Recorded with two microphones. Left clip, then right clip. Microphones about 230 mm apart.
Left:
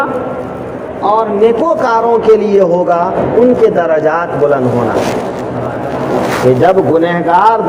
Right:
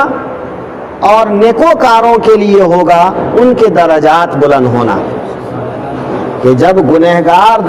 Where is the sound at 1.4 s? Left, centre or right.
Right.